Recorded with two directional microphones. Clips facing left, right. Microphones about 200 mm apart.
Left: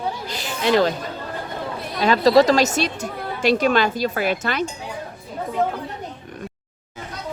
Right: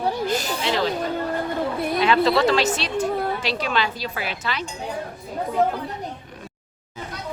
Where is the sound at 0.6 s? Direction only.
50° left (ahead or behind).